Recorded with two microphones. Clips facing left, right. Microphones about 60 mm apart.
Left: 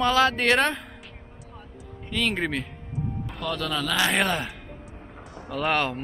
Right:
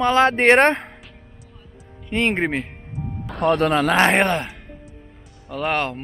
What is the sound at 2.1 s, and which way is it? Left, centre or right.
A man's voice, right.